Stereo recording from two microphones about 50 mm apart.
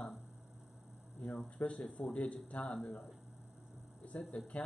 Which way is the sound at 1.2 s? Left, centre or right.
Centre.